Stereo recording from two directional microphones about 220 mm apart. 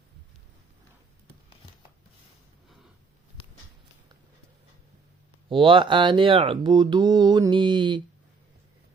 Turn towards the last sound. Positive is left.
turn(degrees=-20)  # may be behind; listen again after turning